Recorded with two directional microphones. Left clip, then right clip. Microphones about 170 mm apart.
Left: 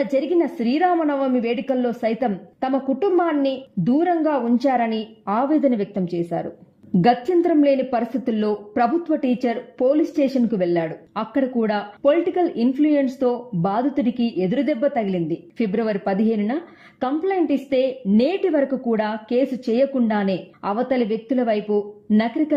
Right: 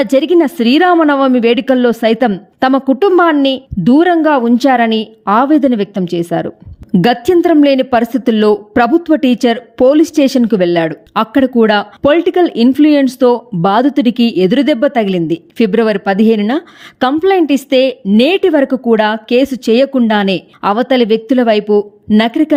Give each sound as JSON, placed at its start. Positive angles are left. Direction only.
{"t": 0.0, "sound": "a woman's voice", "side_deg": -35}